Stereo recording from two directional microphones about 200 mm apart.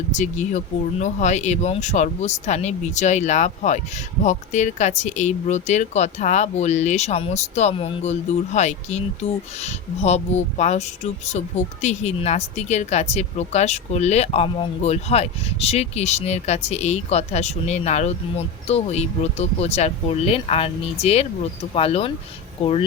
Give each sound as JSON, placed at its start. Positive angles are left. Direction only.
{"t": 0.1, "sound": "speech", "side_deg": 35}